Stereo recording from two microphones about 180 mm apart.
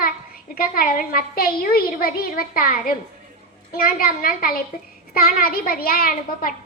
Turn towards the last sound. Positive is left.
turn(degrees=55)  # may be behind; listen again after turning